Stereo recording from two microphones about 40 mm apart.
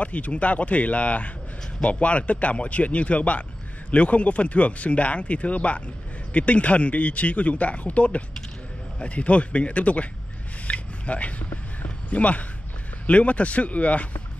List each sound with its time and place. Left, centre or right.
0.0 s speech: left
10.7 s a sound: left
13.0 s speech: left